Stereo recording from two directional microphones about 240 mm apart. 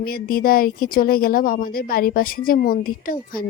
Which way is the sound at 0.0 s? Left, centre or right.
Left.